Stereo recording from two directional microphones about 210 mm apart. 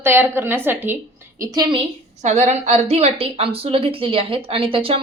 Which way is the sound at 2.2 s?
35° right (ahead or behind).